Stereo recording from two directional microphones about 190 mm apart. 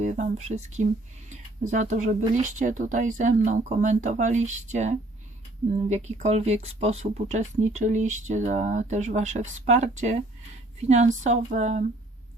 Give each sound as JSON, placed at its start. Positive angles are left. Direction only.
{"t": 0.0, "sound": "speech", "side_deg": -40}